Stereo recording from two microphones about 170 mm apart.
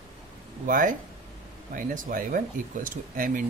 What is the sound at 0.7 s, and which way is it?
Speech, 50° right (ahead or behind).